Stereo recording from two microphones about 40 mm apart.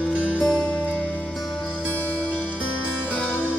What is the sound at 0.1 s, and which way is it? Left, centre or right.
Music, right.